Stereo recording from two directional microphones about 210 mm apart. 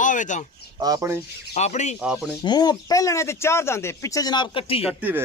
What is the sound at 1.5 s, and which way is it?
Speech, 35° left (ahead or behind).